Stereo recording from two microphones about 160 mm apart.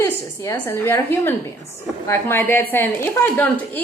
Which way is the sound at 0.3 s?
15° left (ahead or behind).